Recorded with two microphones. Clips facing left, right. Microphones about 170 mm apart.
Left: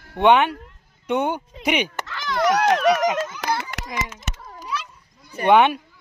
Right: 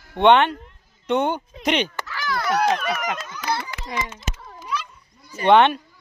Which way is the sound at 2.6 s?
75° left (ahead or behind).